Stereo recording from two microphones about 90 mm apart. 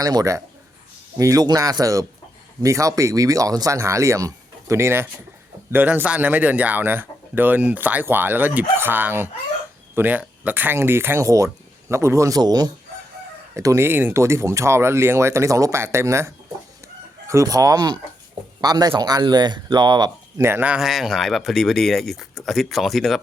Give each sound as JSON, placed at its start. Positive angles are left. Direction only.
{"t": 0.0, "sound": "speech", "side_deg": -45}
{"t": 12.4, "sound": "speech", "side_deg": -50}
{"t": 13.5, "sound": "speech", "side_deg": -35}
{"t": 20.4, "sound": "speech", "side_deg": -25}
{"t": 20.7, "sound": "speech", "side_deg": -5}